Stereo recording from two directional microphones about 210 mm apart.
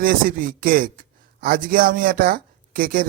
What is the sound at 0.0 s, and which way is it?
Speech, 40° right (ahead or behind).